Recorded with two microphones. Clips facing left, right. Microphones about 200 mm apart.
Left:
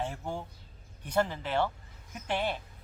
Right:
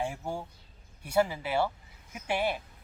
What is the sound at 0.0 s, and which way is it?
Speech, 10° right (ahead or behind).